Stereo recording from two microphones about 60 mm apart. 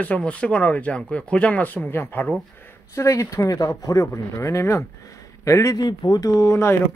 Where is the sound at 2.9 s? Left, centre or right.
Left.